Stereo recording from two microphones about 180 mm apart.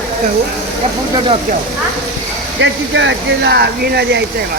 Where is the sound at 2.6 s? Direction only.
90° right; by 4.2 s 65° right (ahead or behind).